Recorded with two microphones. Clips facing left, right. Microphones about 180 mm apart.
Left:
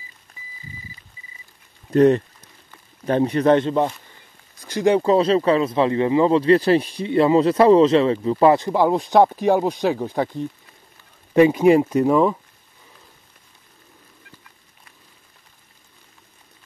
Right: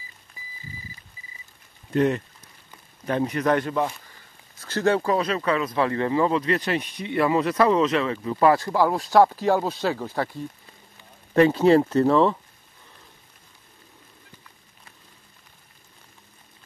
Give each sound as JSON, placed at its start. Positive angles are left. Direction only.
{"t": 1.9, "sound": "speech", "side_deg": 35}
{"t": 4.6, "sound": "speech", "side_deg": 15}